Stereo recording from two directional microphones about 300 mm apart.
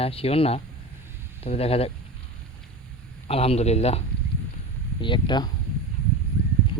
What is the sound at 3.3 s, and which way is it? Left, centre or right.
Speech, centre.